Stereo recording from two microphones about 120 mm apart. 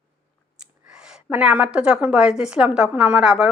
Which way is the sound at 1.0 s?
10° right (ahead or behind).